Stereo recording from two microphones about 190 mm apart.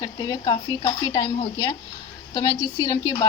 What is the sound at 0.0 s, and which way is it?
A woman's voice, 20° left (ahead or behind).